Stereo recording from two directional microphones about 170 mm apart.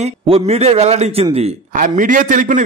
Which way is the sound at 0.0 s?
40° right (ahead or behind).